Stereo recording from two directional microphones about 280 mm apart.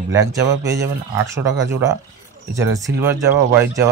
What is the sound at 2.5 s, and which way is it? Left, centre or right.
Speech, centre.